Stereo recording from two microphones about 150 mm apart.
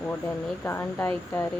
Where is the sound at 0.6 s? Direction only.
15° left (ahead or behind).